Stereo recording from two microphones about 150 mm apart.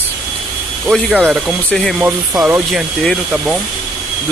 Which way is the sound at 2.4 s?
10° right (ahead or behind).